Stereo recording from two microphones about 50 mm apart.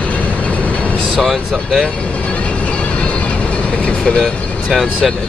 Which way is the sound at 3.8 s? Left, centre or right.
Left.